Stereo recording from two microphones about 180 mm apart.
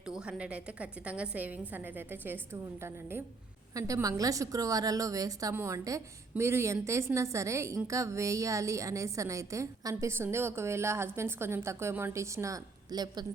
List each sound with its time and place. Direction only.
0.0 s a woman's voice: 5° right (ahead or behind); by 13.2 s 20° right (ahead or behind)